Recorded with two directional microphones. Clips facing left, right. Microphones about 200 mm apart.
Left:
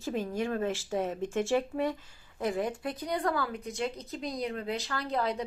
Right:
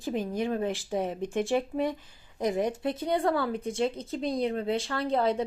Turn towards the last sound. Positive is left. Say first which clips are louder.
# right 5 dB
turn(degrees=-30)  # may be behind; listen again after turning